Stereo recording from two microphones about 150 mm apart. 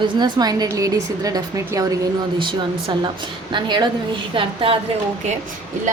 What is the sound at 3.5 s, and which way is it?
Speech, 30° right (ahead or behind).